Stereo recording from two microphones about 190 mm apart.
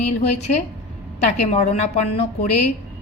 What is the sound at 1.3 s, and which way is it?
A woman's voice, 35° left (ahead or behind).